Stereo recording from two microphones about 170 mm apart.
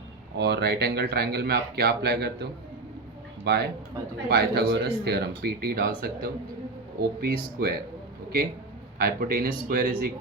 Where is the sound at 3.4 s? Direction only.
75° right (ahead or behind).